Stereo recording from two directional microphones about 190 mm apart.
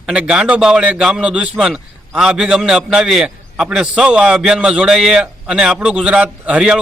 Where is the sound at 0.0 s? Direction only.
5° right (ahead or behind).